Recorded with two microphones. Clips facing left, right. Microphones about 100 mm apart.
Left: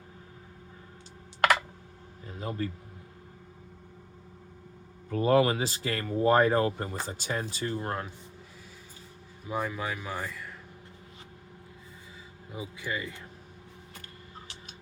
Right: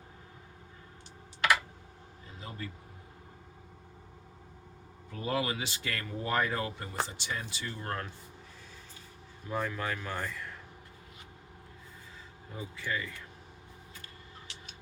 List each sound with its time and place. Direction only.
2.4 s a man's voice: 40° left (ahead or behind)
5.1 s speech: 45° left (ahead or behind)
7.9 s speech: 15° left (ahead or behind)
9.5 s speech: 10° left (ahead or behind)
12.5 s speech: 10° left (ahead or behind)